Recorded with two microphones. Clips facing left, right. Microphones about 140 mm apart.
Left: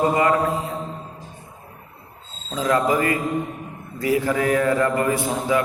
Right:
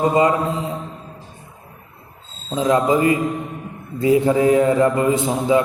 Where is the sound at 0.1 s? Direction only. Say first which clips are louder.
Right 2 dB; 20° right (ahead or behind).